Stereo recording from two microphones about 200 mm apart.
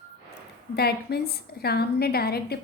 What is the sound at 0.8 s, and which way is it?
A woman's voice, 55° left (ahead or behind).